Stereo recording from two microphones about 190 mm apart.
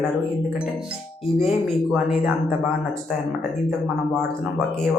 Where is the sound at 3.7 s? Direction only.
Centre (ahead or behind).